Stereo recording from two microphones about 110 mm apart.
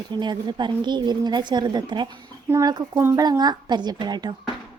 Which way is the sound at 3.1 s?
35° right (ahead or behind).